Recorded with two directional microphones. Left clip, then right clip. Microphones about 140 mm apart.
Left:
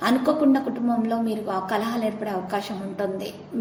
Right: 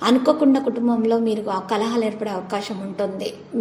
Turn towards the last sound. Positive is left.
turn(degrees=-25)  # may be behind; listen again after turning